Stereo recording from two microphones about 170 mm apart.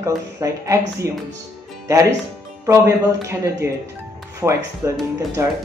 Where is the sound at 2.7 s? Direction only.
15° right (ahead or behind).